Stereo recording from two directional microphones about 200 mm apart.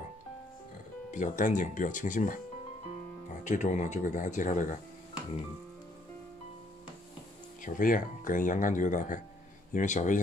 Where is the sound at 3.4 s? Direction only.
35° left (ahead or behind).